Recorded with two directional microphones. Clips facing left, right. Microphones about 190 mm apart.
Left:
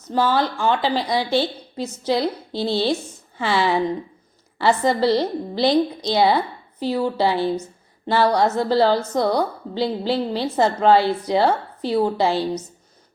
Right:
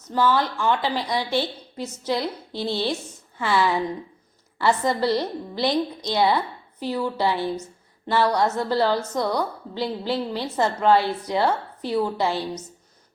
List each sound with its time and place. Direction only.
0.1 s a woman's voice: 30° left (ahead or behind)